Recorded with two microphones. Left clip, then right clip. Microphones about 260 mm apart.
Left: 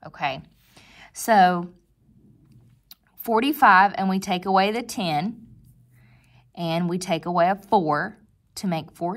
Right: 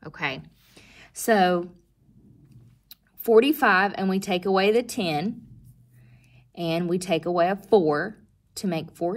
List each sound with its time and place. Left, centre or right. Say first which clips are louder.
0.0 s a sound: left 2 dB; centre
2.5 s speech: left 1 dB; left
6.5 s speech: even; left